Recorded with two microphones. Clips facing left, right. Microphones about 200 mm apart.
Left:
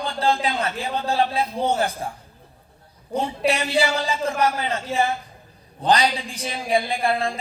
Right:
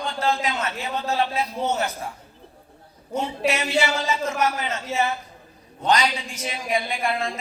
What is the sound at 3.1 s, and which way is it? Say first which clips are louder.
A woman's voice: left 2 dB; 35° left (ahead or behind).